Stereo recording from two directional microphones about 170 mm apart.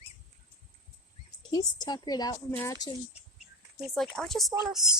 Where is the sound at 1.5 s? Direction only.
25° left (ahead or behind).